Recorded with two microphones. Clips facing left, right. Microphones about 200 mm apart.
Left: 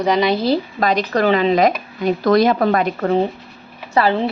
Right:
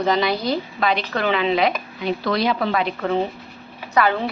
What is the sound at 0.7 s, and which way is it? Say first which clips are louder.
Speech: left 5 dB; 40° left (ahead or behind).